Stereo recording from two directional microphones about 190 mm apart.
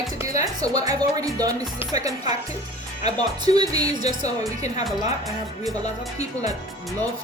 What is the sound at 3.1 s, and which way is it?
Speech, 20° right (ahead or behind).